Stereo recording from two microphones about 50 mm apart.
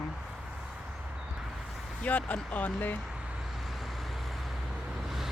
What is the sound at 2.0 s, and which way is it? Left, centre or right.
Speech, left.